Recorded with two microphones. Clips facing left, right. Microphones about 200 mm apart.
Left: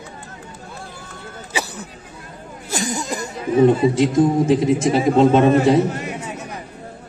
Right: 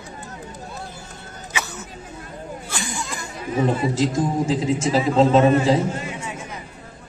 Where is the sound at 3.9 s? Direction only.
60° left (ahead or behind).